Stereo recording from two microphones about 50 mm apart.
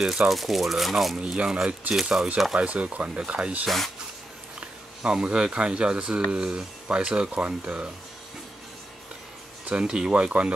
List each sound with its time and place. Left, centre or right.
0.0 s speech: centre
1.1 s speech: centre
2.3 s speech: centre
2.6 s speech: right
3.6 s speech: centre
4.6 s speech: centre
9.7 s speech: centre